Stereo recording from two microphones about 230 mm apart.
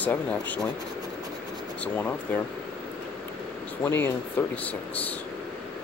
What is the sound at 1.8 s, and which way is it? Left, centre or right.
Speech, centre.